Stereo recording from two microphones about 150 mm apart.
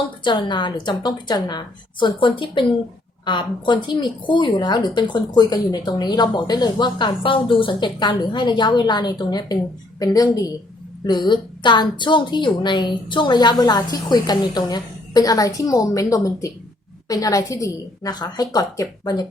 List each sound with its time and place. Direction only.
0.3 s a woman's voice: 30° left (ahead or behind)